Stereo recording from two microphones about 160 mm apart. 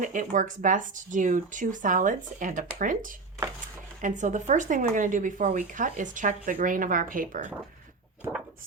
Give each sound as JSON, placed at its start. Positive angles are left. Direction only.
{"t": 0.0, "sound": "speech", "side_deg": -55}